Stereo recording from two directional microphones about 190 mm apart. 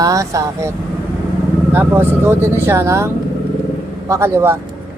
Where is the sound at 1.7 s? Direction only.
10° right (ahead or behind).